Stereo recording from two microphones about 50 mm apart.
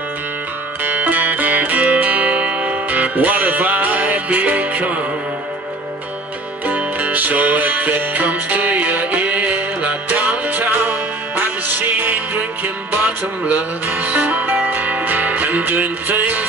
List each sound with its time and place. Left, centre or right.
0.8 s music: right
6.6 s music: right